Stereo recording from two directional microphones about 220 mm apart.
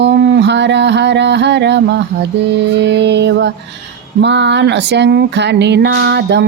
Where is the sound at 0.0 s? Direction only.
50° right (ahead or behind).